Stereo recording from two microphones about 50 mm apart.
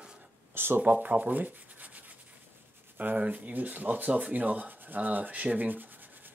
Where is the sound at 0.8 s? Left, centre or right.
Right.